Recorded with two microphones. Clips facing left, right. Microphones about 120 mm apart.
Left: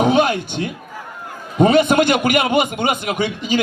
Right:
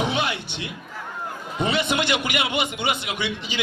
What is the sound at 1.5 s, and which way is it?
A man's voice, 45° left (ahead or behind).